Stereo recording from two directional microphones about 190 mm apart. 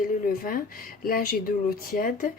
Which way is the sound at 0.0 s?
45° left (ahead or behind).